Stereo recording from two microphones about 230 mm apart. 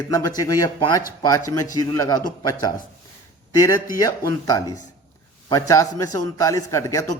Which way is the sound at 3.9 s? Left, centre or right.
Centre.